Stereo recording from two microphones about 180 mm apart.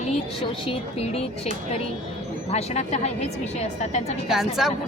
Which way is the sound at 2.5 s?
35° left (ahead or behind).